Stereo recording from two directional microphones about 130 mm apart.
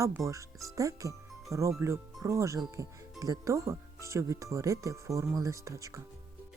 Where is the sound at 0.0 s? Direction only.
25° right (ahead or behind).